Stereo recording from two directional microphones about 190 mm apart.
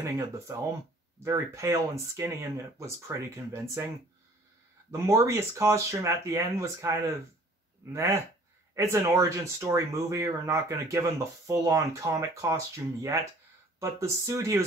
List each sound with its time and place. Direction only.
1.2 s speech: 15° right (ahead or behind)
4.9 s speech: 15° right (ahead or behind)